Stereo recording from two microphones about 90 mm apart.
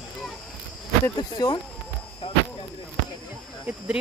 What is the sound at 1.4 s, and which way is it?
Speech, 45° left (ahead or behind).